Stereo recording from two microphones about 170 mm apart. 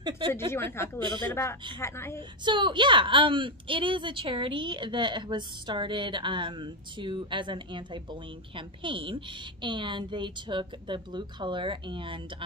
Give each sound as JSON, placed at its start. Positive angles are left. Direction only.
{"t": 0.5, "sound": "a woman's voice", "side_deg": 15}
{"t": 0.9, "sound": "a woman's voice", "side_deg": -25}
{"t": 1.3, "sound": "a woman's voice", "side_deg": 15}
{"t": 2.4, "sound": "a woman's voice", "side_deg": -25}